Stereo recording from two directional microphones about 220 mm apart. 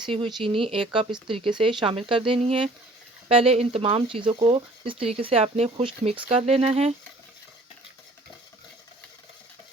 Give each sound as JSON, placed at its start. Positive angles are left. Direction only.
{"t": 0.0, "sound": "speech", "side_deg": -20}